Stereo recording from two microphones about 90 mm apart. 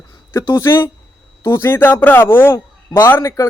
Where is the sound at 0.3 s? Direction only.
30° left (ahead or behind).